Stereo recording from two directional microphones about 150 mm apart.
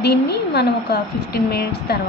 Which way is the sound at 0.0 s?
90° left.